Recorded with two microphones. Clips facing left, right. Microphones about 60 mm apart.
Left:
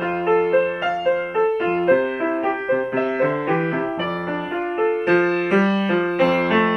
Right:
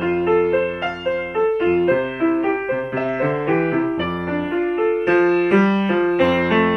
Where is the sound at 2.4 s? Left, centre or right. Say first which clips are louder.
Even; centre.